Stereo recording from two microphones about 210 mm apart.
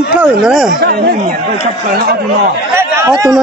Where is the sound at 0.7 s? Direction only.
50° right (ahead or behind).